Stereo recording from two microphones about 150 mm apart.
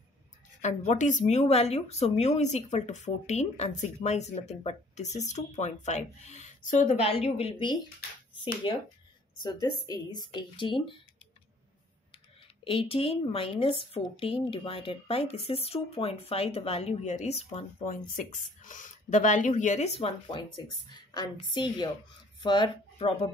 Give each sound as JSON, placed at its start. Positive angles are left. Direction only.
{"t": 0.6, "sound": "a woman's voice", "side_deg": 50}
{"t": 12.6, "sound": "speech", "side_deg": 40}
{"t": 17.8, "sound": "speech", "side_deg": 60}
{"t": 20.2, "sound": "a woman's voice", "side_deg": 30}